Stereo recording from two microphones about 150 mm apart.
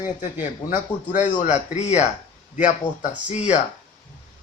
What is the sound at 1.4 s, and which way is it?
A man's voice, 50° left (ahead or behind).